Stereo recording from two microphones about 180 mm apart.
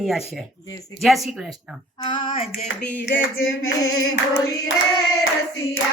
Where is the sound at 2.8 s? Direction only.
80° left.